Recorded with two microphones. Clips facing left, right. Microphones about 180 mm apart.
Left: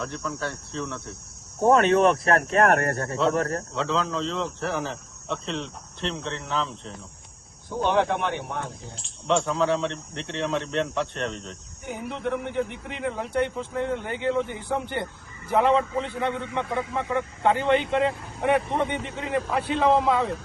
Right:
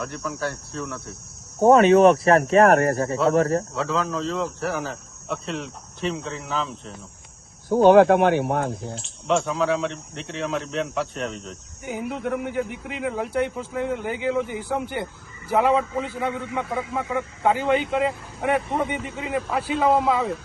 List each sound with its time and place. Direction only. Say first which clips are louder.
0.0 s speech: right 2 dB; 5° right (ahead or behind)
3.3 s speech: right 6 dB; 35° right (ahead or behind)
3.8 s speech: right 1 dB; 5° right (ahead or behind)
8.0 s speech: right 10 dB; 55° right (ahead or behind)
8.3 s speech: right 10 dB; 65° right (ahead or behind)
9.0 s speech: even; centre (ahead or behind)